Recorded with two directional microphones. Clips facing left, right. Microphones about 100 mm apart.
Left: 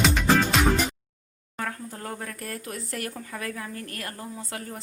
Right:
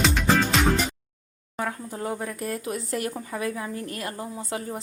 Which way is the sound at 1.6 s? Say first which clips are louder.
Right 4 dB; 15° right (ahead or behind).